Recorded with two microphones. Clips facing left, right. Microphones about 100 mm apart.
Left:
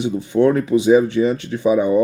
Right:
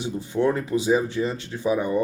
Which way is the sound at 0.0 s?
65° left (ahead or behind).